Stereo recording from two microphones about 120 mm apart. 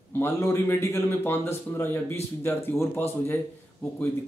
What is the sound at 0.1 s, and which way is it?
A man's voice, 20° left (ahead or behind).